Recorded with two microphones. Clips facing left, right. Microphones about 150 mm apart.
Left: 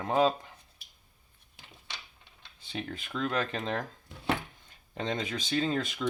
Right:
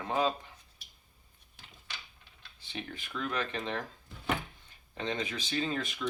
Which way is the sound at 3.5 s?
45° left (ahead or behind).